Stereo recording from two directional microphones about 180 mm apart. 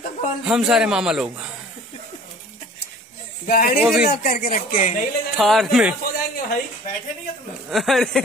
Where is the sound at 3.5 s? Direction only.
50° left (ahead or behind).